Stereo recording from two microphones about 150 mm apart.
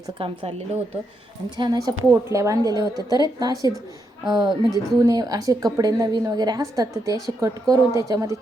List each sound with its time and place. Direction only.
0.2 s a woman's voice: 40° right (ahead or behind)
1.5 s a woman's voice: 25° right (ahead or behind)